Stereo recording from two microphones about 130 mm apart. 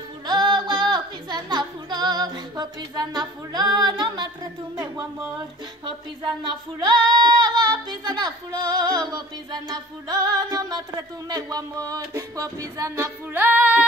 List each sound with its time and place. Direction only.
0.3 s music: 35° right (ahead or behind)
5.9 s speech: 35° right (ahead or behind); by 13.8 s 15° right (ahead or behind)